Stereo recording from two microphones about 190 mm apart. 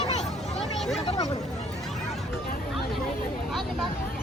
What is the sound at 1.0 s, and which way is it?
Speech, 35° left (ahead or behind).